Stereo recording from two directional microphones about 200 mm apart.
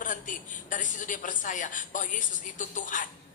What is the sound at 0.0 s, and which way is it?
Speech, 40° left (ahead or behind).